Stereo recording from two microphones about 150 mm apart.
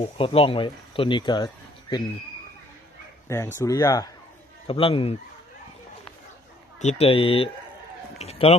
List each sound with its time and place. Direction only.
0.0 s speech: 35° left (ahead or behind)
3.2 s speech: 20° left (ahead or behind)
4.7 s speech: 35° left (ahead or behind)
6.7 s a man's voice: 45° left (ahead or behind)